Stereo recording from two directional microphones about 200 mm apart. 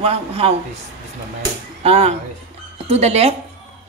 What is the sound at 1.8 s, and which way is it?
A man's voice, 30° right (ahead or behind).